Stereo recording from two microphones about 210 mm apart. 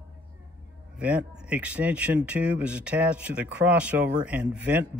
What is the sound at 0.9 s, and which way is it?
Speech, 5° right (ahead or behind).